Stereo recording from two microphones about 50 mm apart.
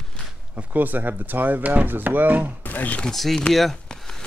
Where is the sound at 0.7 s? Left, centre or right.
Right.